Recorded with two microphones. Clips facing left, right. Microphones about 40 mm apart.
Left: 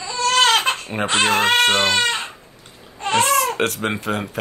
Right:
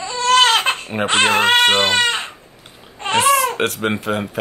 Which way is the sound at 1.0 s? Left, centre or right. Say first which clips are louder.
Right 2 dB; right.